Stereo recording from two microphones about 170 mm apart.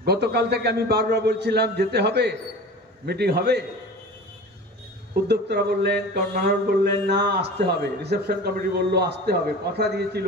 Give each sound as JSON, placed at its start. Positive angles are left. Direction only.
{"t": 0.0, "sound": "mantra", "side_deg": -70}
{"t": 5.3, "sound": "mantra", "side_deg": -75}